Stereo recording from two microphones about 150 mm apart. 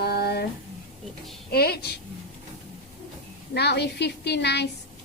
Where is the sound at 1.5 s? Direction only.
90° left.